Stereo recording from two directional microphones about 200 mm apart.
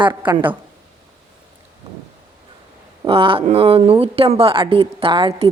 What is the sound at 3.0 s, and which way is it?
Speech, 25° right (ahead or behind).